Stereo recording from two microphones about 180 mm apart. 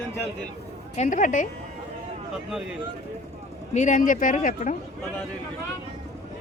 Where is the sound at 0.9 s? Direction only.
40° left (ahead or behind).